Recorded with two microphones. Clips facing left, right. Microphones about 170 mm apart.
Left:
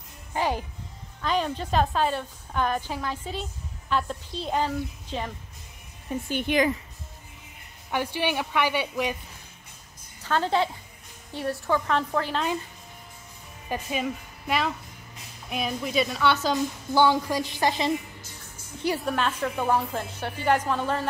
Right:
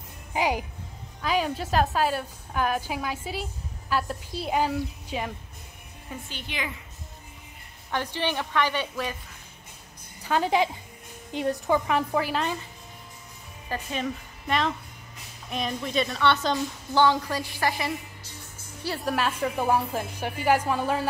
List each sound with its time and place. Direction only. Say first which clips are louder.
0.3 s a child's voice: right 1 dB; 10° right (ahead or behind)
6.2 s a woman's voice: left 13 dB; 50° left (ahead or behind)
7.9 s a woman's voice: left 2 dB; 10° left (ahead or behind)
10.2 s a woman's voice: right 1 dB; 10° right (ahead or behind)
13.7 s a woman's voice: left 1 dB; 10° left (ahead or behind)
19.0 s a woman's voice: even; 5° right (ahead or behind)